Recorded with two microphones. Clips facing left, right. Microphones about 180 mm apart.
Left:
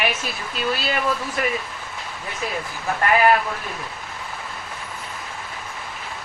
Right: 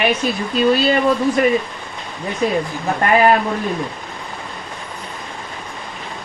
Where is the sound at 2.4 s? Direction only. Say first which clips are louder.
Right 10 dB; 25° right (ahead or behind).